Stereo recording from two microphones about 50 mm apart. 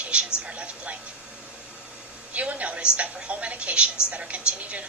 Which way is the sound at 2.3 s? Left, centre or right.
Right.